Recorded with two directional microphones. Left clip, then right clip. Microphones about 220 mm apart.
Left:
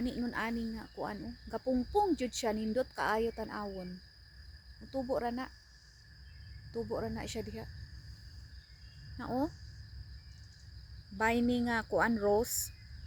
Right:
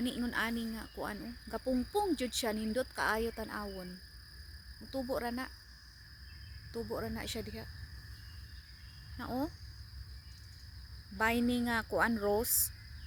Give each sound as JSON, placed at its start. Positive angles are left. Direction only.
{"t": 0.0, "sound": "cricket", "side_deg": -15}
{"t": 4.9, "sound": "speech", "side_deg": -5}
{"t": 6.9, "sound": "speech", "side_deg": -5}
{"t": 9.1, "sound": "speech", "side_deg": 0}
{"t": 11.2, "sound": "speech", "side_deg": -5}